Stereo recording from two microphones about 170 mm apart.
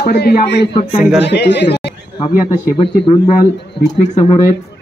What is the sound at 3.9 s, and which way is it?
Speech, 45° left (ahead or behind).